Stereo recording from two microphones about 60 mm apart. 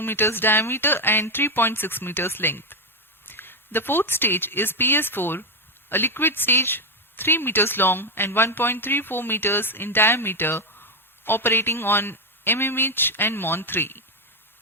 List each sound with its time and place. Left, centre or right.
0.0 s speech: left